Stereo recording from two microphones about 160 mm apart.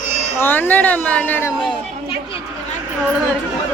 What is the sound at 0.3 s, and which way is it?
Speech, 15° left (ahead or behind).